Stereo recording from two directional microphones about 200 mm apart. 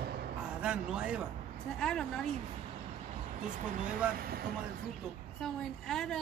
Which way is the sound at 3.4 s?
40° right (ahead or behind).